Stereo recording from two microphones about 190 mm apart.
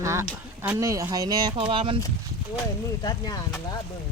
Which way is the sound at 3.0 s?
20° left (ahead or behind).